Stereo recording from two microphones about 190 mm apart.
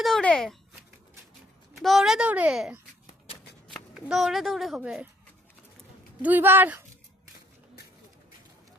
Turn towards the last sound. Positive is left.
turn(degrees=-10)  # may be behind; listen again after turning